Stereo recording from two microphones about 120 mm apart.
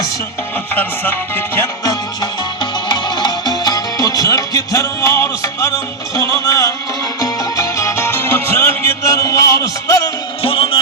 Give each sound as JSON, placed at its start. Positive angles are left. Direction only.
{"t": 0.7, "sound": "music", "side_deg": 15}
{"t": 1.9, "sound": "music", "side_deg": 35}
{"t": 10.4, "sound": "music", "side_deg": 50}